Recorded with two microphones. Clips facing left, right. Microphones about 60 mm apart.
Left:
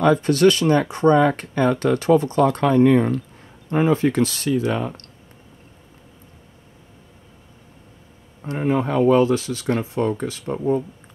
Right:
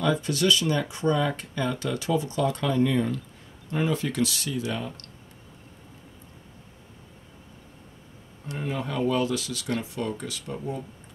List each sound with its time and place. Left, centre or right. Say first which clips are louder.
0.0 s speech: left 9 dB; left
3.7 s speech: left 9 dB; left
8.5 s speech: left 10 dB; left